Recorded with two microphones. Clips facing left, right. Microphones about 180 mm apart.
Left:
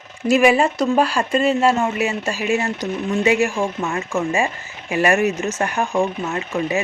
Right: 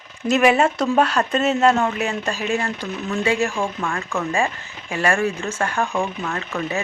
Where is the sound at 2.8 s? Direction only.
25° left (ahead or behind).